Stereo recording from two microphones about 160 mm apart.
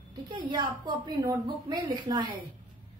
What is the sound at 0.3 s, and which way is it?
A woman's voice, 25° right (ahead or behind).